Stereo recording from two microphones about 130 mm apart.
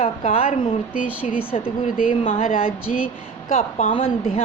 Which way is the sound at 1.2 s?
60° left (ahead or behind).